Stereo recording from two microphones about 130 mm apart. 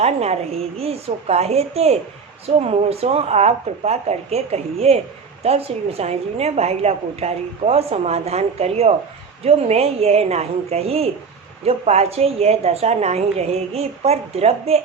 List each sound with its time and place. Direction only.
0.0 s a woman's voice: 55° right (ahead or behind)